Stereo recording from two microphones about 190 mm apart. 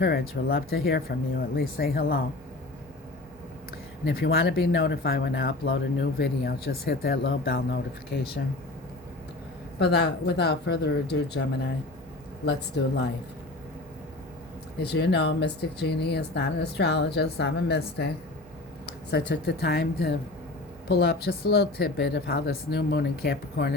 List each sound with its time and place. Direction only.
0.0 s speech: 60° left (ahead or behind)
4.0 s speech: 55° left (ahead or behind)
9.7 s speech: 60° left (ahead or behind)
14.8 s speech: 60° left (ahead or behind)
19.1 s speech: 65° left (ahead or behind)